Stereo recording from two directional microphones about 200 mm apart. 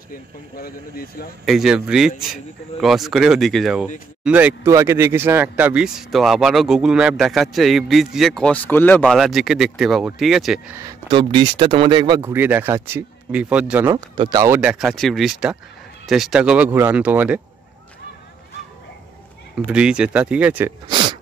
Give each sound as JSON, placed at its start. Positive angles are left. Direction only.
{"t": 0.1, "sound": "speech", "side_deg": 50}
{"t": 1.4, "sound": "speech", "side_deg": 0}
{"t": 10.8, "sound": "speech", "side_deg": -20}
{"t": 12.2, "sound": "speech", "side_deg": -10}
{"t": 13.9, "sound": "speech", "side_deg": -25}
{"t": 19.6, "sound": "speech", "side_deg": -5}
{"t": 20.9, "sound": "a sound", "side_deg": -25}